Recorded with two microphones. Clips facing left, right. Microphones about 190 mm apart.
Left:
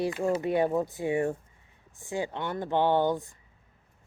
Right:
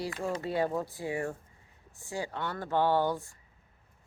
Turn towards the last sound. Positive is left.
turn(degrees=20)  # may be behind; listen again after turning